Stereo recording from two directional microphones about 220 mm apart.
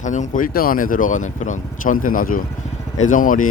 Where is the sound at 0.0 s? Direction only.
35° left (ahead or behind).